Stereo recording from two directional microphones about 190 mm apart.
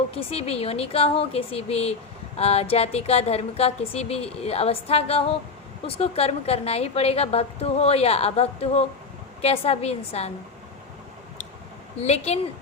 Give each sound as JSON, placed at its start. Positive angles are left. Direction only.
{"t": 0.1, "sound": "speech", "side_deg": 30}
{"t": 11.9, "sound": "speech", "side_deg": 35}